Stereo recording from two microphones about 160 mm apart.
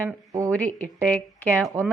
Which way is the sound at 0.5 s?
5° left (ahead or behind).